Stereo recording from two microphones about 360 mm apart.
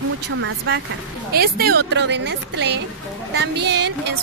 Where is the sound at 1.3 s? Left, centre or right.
Right.